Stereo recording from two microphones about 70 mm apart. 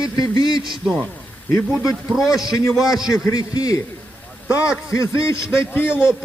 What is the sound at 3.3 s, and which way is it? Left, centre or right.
Speech, left.